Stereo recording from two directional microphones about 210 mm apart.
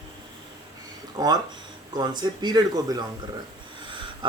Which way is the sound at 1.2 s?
15° right (ahead or behind).